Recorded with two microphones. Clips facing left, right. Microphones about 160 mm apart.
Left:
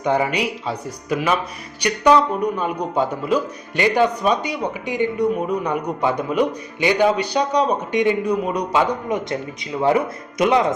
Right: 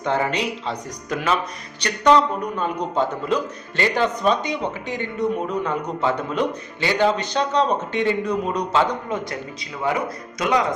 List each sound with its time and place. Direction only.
0.0 s a man's voice: 15° left (ahead or behind)
9.8 s speech: 25° left (ahead or behind)